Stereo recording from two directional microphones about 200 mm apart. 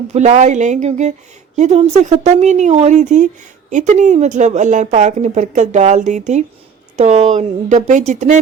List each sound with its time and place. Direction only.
0.1 s a woman's voice: 35° right (ahead or behind)